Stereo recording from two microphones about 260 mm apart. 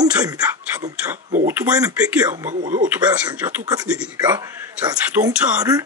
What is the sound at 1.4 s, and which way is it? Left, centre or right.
Speech, centre.